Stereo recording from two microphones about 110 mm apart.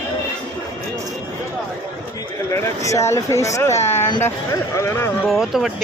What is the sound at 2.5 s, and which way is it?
Speech, 30° left (ahead or behind).